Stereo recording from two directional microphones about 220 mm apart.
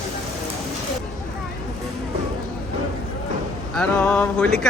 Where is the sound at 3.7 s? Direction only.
5° left (ahead or behind).